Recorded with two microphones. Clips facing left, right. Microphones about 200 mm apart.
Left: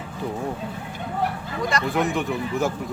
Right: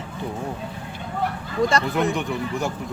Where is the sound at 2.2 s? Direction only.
Centre (ahead or behind).